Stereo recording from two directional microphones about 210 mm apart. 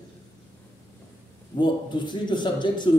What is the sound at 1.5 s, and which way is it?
A man's voice, 20° left (ahead or behind).